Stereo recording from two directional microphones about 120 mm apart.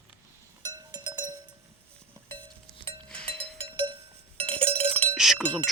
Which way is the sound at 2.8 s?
50° right (ahead or behind).